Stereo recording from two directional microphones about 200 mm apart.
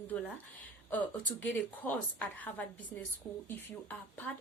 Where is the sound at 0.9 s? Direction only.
10° left (ahead or behind).